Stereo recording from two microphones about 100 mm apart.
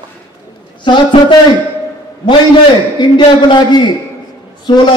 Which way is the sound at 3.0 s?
50° left (ahead or behind).